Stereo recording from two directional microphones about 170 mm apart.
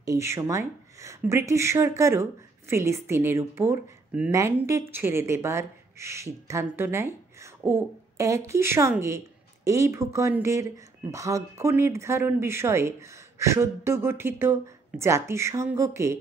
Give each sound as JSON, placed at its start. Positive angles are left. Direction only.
{"t": 0.0, "sound": "speech", "side_deg": -15}
{"t": 7.6, "sound": "a sound", "side_deg": -15}
{"t": 8.5, "sound": "speech", "side_deg": -15}